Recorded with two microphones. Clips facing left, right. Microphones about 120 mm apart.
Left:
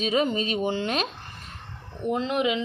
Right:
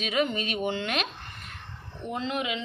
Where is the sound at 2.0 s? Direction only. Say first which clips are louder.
Left 7 dB; 50° left (ahead or behind).